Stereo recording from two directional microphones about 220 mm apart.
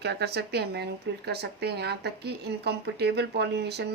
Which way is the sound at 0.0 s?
50° right (ahead or behind).